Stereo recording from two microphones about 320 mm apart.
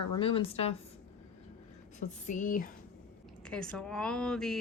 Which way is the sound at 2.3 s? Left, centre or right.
Left.